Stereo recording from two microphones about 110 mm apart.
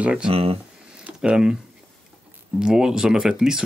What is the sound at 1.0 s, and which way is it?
Speech, 10° right (ahead or behind).